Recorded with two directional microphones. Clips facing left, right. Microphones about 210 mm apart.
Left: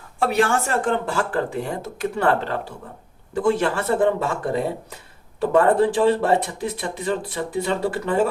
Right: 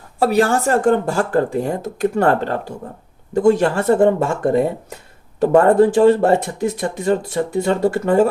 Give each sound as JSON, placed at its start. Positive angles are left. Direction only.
{"t": 0.2, "sound": "speech", "side_deg": -40}